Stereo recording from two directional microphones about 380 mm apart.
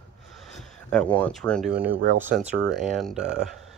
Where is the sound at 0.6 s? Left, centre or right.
Centre.